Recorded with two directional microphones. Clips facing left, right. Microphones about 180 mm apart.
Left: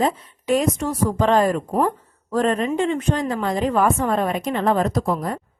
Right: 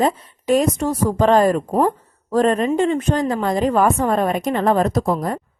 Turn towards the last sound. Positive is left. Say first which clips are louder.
# right 3 dB
turn(degrees=-40)  # may be behind; listen again after turning